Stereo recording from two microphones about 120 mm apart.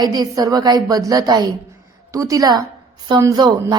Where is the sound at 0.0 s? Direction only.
35° right (ahead or behind).